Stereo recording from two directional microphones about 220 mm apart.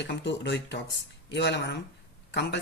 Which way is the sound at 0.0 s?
55° left (ahead or behind).